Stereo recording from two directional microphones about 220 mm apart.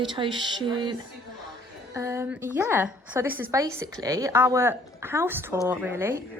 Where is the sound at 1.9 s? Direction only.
10° right (ahead or behind).